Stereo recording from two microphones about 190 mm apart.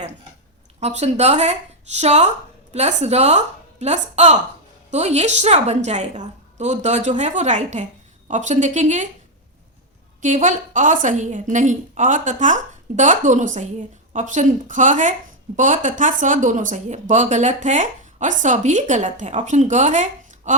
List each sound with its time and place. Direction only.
0.8 s speech: 35° right (ahead or behind)
10.2 s speech: 40° right (ahead or behind)